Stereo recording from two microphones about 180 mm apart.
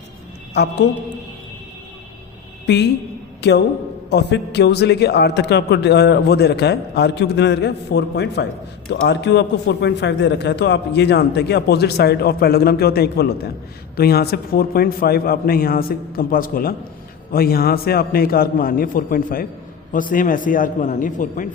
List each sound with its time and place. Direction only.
0.5 s a man's voice: 70° left (ahead or behind)
3.4 s a woman's voice: 70° left (ahead or behind); by 21.4 s 45° left (ahead or behind)